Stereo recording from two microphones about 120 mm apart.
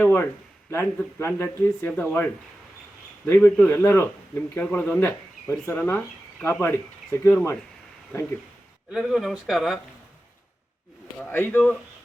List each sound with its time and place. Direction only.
0.0 s a sound: 15° left (ahead or behind)
0.7 s speech: 20° left (ahead or behind)
8.9 s speech: 5° right (ahead or behind)
11.2 s speech: 15° left (ahead or behind)